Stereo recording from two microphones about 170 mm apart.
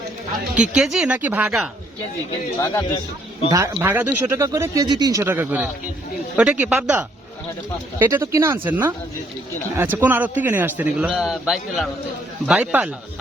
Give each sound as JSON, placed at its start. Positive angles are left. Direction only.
{"t": 0.5, "sound": "a man's voice", "side_deg": -5}
{"t": 2.6, "sound": "speech", "side_deg": 15}
{"t": 3.5, "sound": "speech", "side_deg": -15}
{"t": 5.2, "sound": "a man's voice", "side_deg": -10}
{"t": 11.1, "sound": "a man's voice", "side_deg": 0}